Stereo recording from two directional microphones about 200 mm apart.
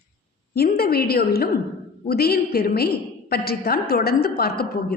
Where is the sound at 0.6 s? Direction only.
50° left (ahead or behind).